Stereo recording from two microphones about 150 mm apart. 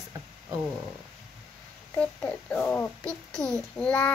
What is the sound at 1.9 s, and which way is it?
A child's voice, 10° left (ahead or behind).